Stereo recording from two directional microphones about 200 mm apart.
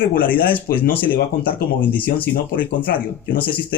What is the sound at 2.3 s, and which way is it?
Speech, 45° left (ahead or behind).